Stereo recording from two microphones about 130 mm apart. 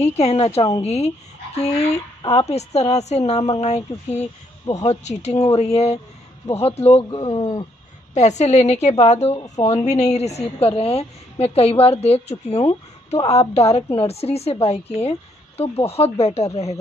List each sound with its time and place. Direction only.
0.0 s a woman's voice: 55° left (ahead or behind)
7.1 s speech: 35° left (ahead or behind)
8.1 s speech: 60° left (ahead or behind)
9.3 s speech: 30° left (ahead or behind)
9.7 s a woman's voice: 55° left (ahead or behind)